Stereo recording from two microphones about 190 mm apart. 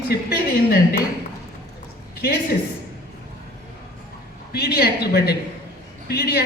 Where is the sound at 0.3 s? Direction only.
55° left (ahead or behind).